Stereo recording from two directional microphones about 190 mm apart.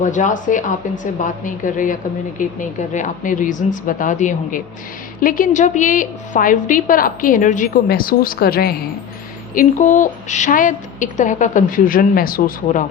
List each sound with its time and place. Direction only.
0.0 s a woman's voice: 40° left (ahead or behind)
9.6 s a woman's voice: 40° left (ahead or behind)